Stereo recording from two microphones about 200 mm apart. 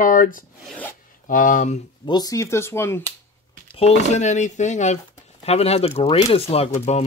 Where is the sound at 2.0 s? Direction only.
20° left (ahead or behind).